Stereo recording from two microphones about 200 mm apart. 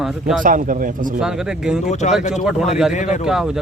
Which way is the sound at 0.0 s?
Centre (ahead or behind).